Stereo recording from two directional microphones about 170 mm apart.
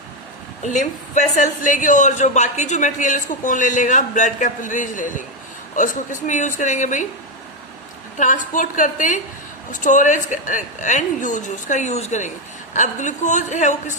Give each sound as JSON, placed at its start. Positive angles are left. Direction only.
{"t": 0.6, "sound": "a man's voice", "side_deg": 45}
{"t": 8.2, "sound": "a man's voice", "side_deg": 50}